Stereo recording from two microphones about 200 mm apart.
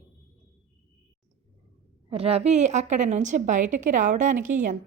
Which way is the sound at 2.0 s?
30° right (ahead or behind).